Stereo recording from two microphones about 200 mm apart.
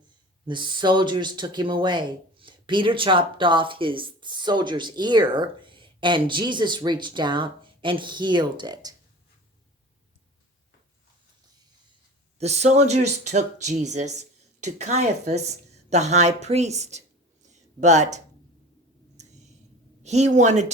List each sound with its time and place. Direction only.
0.4 s speech: 25° right (ahead or behind)
12.4 s speech: 35° right (ahead or behind)
17.5 s a sound: 35° right (ahead or behind)
20.0 s speech: 35° right (ahead or behind)